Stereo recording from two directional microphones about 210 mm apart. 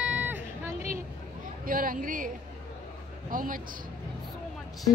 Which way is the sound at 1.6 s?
40° right (ahead or behind).